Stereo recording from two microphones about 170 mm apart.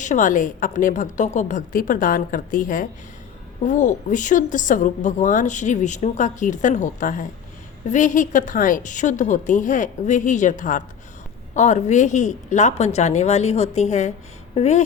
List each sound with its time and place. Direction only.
0.0 s speech: 45° left (ahead or behind)